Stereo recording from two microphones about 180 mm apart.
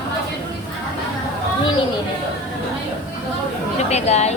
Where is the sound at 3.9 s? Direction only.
35° left (ahead or behind).